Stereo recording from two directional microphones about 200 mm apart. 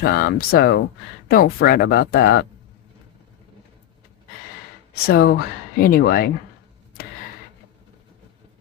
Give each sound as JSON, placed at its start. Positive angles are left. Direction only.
{"t": 0.0, "sound": "speech", "side_deg": 50}
{"t": 5.0, "sound": "speech", "side_deg": 50}